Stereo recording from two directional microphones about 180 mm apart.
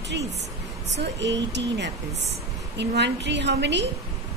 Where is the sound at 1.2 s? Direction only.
75° right (ahead or behind).